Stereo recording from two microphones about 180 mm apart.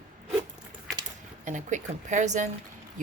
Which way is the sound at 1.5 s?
45° right (ahead or behind).